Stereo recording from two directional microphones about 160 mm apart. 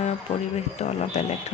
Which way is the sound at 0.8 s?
45° left (ahead or behind).